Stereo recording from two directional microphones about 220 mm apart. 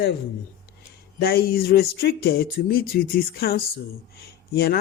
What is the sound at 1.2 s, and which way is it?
Speech, 45° left (ahead or behind).